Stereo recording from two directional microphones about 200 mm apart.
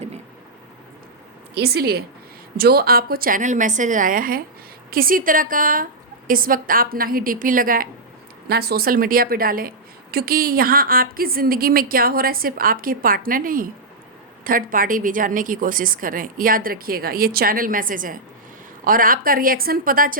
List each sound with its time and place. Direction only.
1.5 s a woman's voice: 50° right (ahead or behind)